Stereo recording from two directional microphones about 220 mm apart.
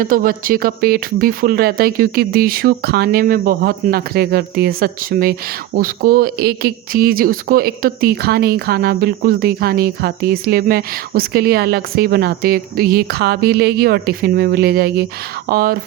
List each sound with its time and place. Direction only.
0.0 s speech: 40° right (ahead or behind)